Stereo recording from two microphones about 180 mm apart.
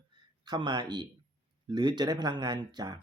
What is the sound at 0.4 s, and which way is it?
Speech, 25° right (ahead or behind).